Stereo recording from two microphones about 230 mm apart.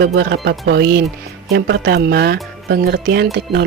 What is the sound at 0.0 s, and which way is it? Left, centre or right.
Speech, right.